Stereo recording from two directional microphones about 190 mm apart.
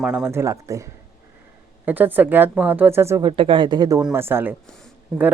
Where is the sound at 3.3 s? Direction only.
25° right (ahead or behind); by 4.5 s 10° right (ahead or behind).